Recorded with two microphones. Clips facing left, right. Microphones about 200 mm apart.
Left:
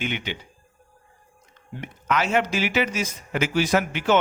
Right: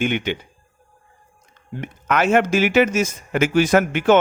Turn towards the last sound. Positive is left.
turn(degrees=-55)  # may be behind; listen again after turning